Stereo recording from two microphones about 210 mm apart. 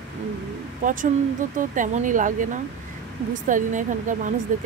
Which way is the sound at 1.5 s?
40° right (ahead or behind).